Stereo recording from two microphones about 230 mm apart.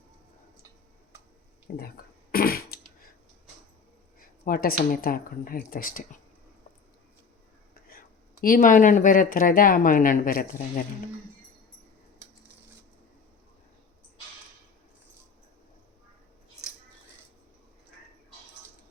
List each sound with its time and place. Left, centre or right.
1.6 s speech: left
2.3 s a sound: left
4.4 s speech: left
7.9 s speech: left